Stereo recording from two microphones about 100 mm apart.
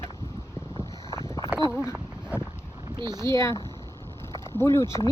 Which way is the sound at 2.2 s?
10° right (ahead or behind).